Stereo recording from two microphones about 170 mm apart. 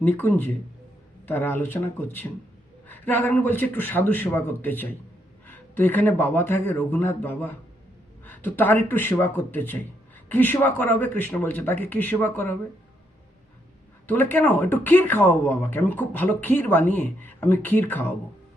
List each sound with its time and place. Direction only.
0.0 s speech: 10° left (ahead or behind)
14.1 s speech: 10° left (ahead or behind)